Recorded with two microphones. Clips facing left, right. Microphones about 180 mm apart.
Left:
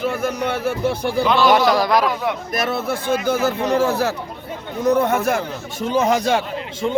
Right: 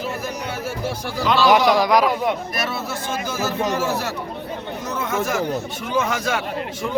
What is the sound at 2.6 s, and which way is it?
Speech, 50° left (ahead or behind).